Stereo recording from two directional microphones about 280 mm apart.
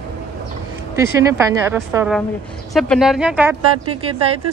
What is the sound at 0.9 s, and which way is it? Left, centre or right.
A woman's voice, centre.